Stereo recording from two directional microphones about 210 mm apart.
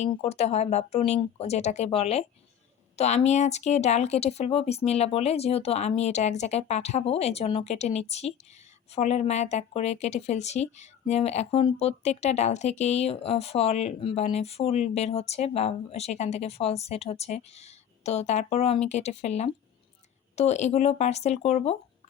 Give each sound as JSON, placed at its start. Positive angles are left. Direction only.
{"t": 0.0, "sound": "speech", "side_deg": 30}